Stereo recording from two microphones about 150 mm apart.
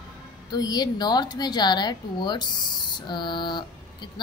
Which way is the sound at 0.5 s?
25° left (ahead or behind).